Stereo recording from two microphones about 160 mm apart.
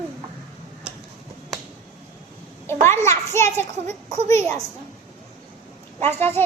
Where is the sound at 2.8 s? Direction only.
15° left (ahead or behind).